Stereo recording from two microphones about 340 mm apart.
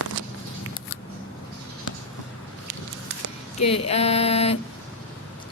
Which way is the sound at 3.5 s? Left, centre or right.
Centre.